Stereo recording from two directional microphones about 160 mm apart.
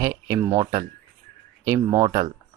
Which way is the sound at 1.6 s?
20° right (ahead or behind).